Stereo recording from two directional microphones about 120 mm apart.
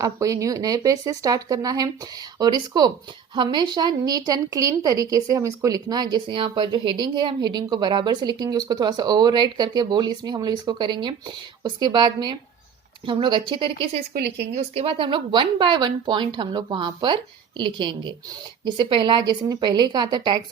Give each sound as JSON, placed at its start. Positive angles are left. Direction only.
{"t": 0.0, "sound": "a woman's voice", "side_deg": -30}